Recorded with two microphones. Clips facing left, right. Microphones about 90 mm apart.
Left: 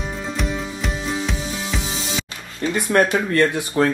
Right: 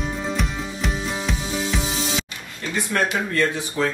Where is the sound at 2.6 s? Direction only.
25° left (ahead or behind).